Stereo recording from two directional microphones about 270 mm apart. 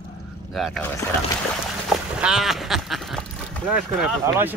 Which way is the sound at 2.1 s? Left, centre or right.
Centre.